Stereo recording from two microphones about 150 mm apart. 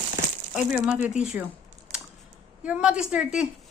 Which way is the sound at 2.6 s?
10° right (ahead or behind).